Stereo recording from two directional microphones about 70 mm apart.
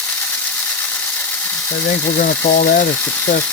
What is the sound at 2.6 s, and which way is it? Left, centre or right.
Speech, left.